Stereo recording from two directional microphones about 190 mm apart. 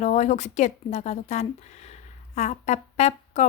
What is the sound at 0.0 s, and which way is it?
A woman's voice, 40° left (ahead or behind).